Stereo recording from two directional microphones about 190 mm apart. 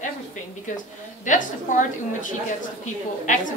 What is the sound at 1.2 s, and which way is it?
A woman's voice, 40° left (ahead or behind).